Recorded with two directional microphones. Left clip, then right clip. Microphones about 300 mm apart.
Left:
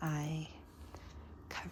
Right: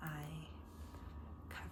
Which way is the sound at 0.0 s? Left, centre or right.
Centre.